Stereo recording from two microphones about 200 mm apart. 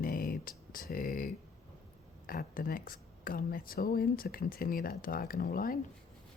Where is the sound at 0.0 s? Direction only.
45° left (ahead or behind).